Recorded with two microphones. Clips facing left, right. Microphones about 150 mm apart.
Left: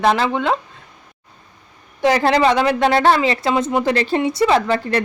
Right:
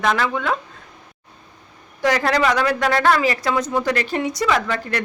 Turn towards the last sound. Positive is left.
turn(degrees=30)  # may be behind; listen again after turning